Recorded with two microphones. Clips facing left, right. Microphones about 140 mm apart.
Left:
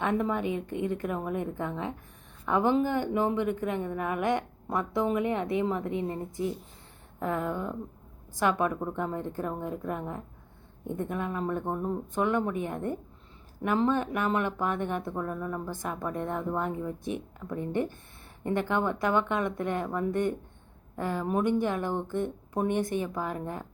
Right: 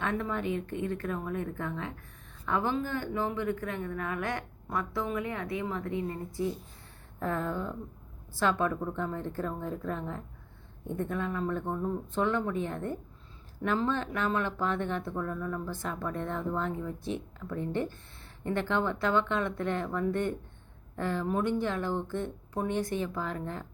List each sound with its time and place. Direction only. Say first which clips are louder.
0.0 s a woman's voice: left 4 dB; 20° left (ahead or behind)